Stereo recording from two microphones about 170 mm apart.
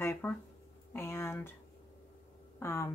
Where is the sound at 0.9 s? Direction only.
15° left (ahead or behind).